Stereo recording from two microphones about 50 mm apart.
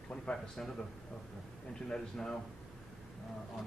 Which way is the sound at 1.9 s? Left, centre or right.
Centre.